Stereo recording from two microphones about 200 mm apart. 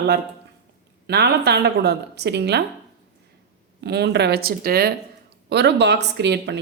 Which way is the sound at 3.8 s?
55° right (ahead or behind).